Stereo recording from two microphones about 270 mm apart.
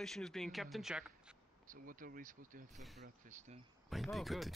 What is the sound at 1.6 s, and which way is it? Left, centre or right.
Speech, right.